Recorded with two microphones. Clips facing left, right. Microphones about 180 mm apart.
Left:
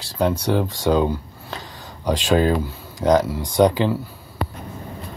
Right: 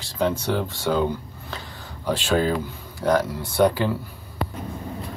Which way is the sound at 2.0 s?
15° left (ahead or behind).